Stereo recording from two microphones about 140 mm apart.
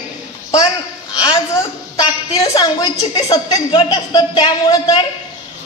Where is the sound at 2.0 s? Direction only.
30° left (ahead or behind).